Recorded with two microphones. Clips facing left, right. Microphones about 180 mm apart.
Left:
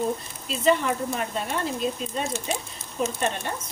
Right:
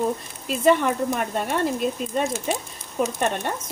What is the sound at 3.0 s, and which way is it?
Speech, 45° right (ahead or behind).